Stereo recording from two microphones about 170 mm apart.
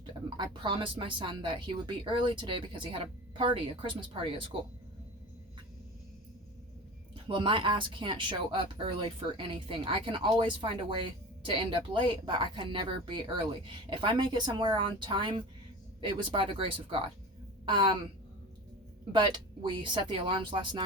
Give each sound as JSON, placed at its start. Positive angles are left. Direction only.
{"t": 0.0, "sound": "speech", "side_deg": -30}
{"t": 7.3, "sound": "speech", "side_deg": -30}
{"t": 19.1, "sound": "speech", "side_deg": -30}